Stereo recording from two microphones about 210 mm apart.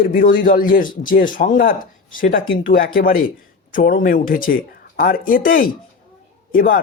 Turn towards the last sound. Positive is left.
turn(degrees=40)  # may be behind; listen again after turning